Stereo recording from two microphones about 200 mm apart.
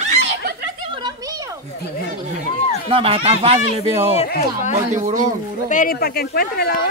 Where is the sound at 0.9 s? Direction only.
20° right (ahead or behind).